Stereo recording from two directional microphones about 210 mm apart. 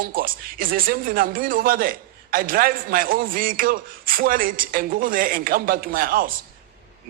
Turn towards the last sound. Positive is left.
turn(degrees=-45)  # may be behind; listen again after turning